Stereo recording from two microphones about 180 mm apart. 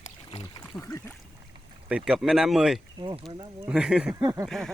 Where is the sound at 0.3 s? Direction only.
30° left (ahead or behind).